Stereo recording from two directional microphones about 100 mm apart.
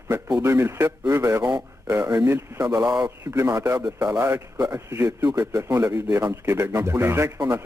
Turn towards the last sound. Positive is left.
turn(degrees=-25)  # may be behind; listen again after turning